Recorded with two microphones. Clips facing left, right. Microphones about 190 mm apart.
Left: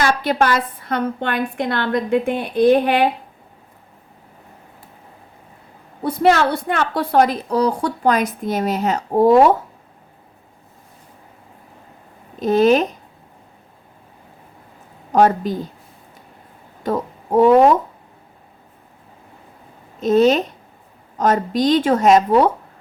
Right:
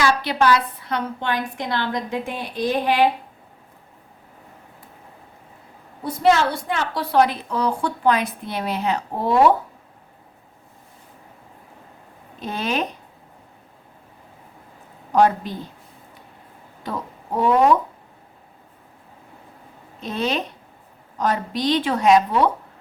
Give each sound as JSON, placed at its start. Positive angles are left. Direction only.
{"t": 0.0, "sound": "a woman's voice", "side_deg": 50}
{"t": 6.0, "sound": "a woman's voice", "side_deg": 60}
{"t": 12.4, "sound": "speech", "side_deg": 40}
{"t": 15.1, "sound": "a woman's voice", "side_deg": 45}
{"t": 16.8, "sound": "speech", "side_deg": 45}
{"t": 20.0, "sound": "a woman's voice", "side_deg": 45}